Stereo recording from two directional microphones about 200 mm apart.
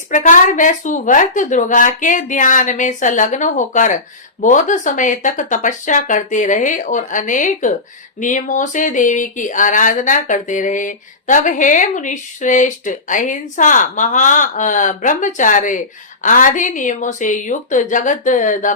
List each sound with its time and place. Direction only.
0.1 s a woman's voice: 40° left (ahead or behind)